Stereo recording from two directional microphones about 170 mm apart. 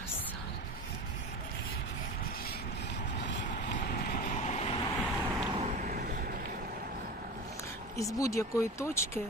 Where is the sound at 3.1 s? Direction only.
90° left.